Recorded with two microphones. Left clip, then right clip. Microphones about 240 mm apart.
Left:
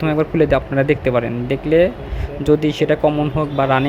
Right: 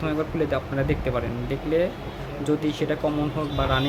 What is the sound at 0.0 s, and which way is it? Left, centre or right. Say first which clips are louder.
Speech: left 9 dB; left.